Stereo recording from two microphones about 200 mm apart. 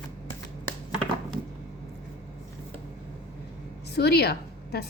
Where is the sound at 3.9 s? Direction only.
55° left (ahead or behind).